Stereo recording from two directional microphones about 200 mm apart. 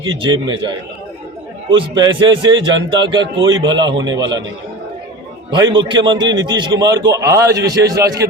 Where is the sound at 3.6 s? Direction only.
20° right (ahead or behind).